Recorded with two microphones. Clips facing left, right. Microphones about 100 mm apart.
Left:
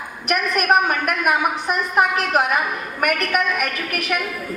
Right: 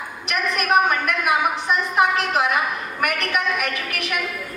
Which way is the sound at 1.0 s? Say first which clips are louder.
Left 1 dB; 50° left (ahead or behind).